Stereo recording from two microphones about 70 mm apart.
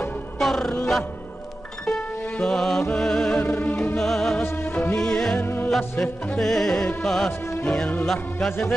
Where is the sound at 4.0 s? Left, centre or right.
Centre.